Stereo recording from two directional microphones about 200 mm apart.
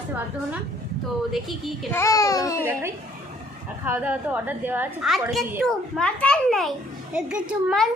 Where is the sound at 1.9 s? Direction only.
15° left (ahead or behind).